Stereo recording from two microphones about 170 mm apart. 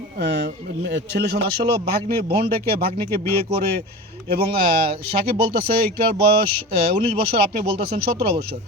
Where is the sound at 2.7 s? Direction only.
65° right (ahead or behind).